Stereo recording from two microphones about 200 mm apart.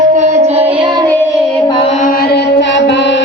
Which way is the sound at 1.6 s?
25° left (ahead or behind).